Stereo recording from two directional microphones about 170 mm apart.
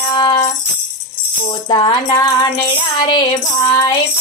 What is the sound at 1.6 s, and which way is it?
Music, 25° left (ahead or behind).